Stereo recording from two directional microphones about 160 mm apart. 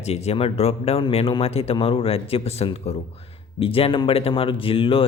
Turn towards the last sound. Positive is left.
turn(degrees=35)  # may be behind; listen again after turning